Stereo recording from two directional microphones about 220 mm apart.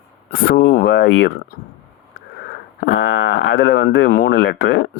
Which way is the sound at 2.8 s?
50° left (ahead or behind).